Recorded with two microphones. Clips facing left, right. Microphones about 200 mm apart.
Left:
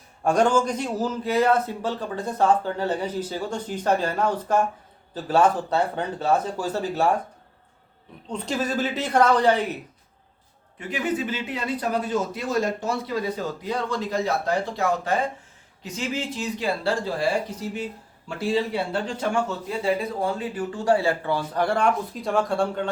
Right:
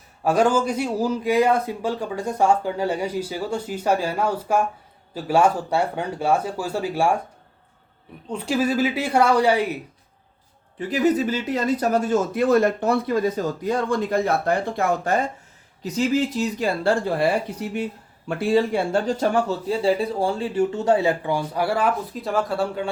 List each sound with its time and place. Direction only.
0.3 s a man's voice: 5° right (ahead or behind)
8.3 s a man's voice: 10° right (ahead or behind)
10.8 s speech: 35° right (ahead or behind)
15.8 s speech: 40° right (ahead or behind); by 22.9 s 5° right (ahead or behind)